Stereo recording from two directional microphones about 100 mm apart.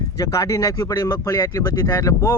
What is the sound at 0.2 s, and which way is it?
Speech, 35° left (ahead or behind).